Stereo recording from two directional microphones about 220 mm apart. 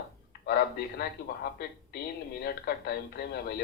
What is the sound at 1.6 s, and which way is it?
Speech, 45° left (ahead or behind).